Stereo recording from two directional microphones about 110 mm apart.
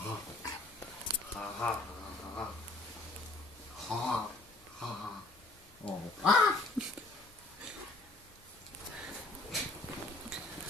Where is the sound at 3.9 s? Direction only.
Centre (ahead or behind).